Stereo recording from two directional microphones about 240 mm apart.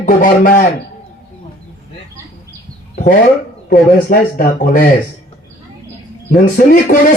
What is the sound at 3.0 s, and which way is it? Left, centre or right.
Speech, left.